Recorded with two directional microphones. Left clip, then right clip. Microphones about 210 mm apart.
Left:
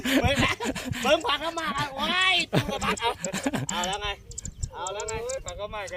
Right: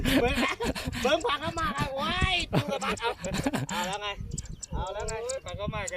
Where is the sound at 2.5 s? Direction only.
5° left (ahead or behind).